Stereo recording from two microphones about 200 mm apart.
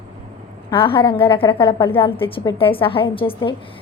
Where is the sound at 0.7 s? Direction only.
25° left (ahead or behind).